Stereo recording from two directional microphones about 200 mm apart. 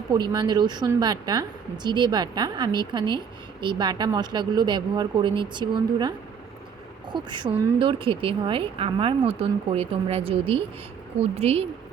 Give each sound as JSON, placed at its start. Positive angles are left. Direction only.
{"t": 0.1, "sound": "a woman's voice", "side_deg": -20}